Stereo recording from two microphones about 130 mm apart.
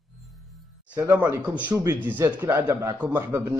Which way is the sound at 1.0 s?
15° right (ahead or behind).